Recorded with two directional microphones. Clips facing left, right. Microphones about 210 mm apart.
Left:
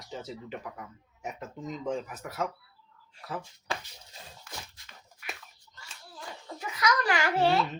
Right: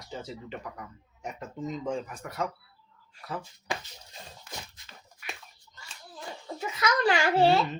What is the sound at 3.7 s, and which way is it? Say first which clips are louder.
Speech: right 1 dB; 15° right (ahead or behind).